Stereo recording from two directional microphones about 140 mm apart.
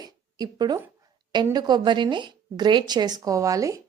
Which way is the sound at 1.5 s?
30° right (ahead or behind).